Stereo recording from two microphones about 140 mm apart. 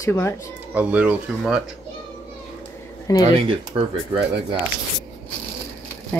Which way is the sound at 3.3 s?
40° right (ahead or behind).